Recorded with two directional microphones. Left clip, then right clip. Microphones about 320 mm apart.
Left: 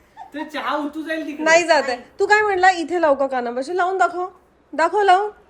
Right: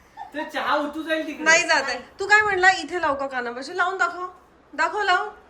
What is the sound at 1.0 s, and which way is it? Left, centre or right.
A woman's voice, centre.